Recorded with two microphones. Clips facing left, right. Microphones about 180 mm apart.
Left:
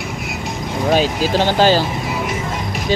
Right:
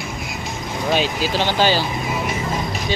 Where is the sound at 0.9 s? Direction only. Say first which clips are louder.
Left 4 dB; 45° left (ahead or behind).